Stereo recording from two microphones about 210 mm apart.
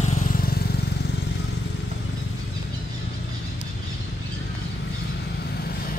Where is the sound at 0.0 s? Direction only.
35° left (ahead or behind).